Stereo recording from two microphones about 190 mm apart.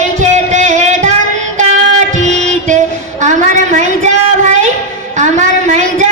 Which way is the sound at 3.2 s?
40° right (ahead or behind).